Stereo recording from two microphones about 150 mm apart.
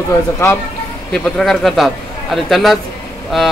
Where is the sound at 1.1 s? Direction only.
Centre (ahead or behind).